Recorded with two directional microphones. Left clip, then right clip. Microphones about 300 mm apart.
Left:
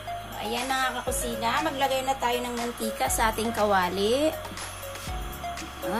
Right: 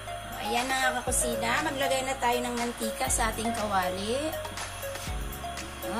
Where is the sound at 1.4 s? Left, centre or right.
Left.